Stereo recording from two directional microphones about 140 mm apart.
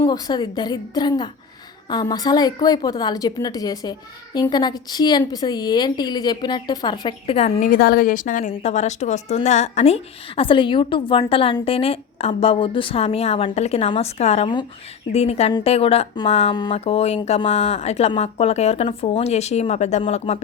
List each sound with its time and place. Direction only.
0.0 s a woman's voice: 30° left (ahead or behind)
7.3 s a woman's voice: 50° left (ahead or behind)
7.6 s a woman's voice: 85° left; by 20.4 s 45° left (ahead or behind)